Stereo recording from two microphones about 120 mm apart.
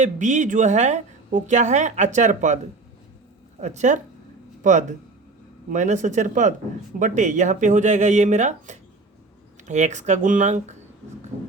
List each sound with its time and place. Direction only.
0.0 s speech: 90° right
3.6 s speech: 80° right